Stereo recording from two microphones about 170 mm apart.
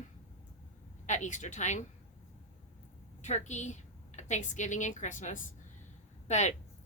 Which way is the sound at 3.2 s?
45° left (ahead or behind).